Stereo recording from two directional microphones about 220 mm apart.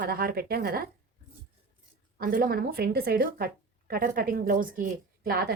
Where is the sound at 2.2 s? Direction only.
40° right (ahead or behind).